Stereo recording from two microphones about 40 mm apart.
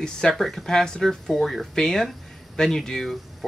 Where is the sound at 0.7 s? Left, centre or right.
Centre.